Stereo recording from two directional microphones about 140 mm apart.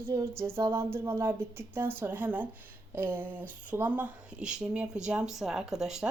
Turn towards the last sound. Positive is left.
turn(degrees=-5)  # may be behind; listen again after turning